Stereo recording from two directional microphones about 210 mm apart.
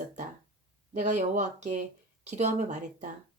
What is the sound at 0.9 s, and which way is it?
Speech, 35° right (ahead or behind).